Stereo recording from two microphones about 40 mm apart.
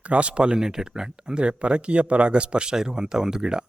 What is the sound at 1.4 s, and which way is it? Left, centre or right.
Speech, right.